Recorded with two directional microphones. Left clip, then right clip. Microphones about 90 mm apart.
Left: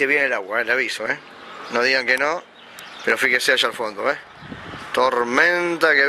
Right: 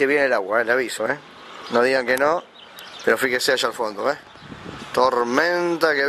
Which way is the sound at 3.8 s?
10° right (ahead or behind).